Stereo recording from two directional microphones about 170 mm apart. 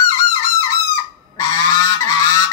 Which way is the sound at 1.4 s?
20° left (ahead or behind).